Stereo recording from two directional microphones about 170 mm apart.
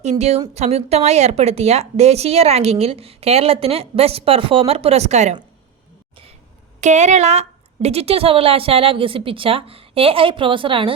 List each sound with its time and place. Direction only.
0.0 s a woman's voice: 40° right (ahead or behind)
6.8 s a woman's voice: 45° right (ahead or behind)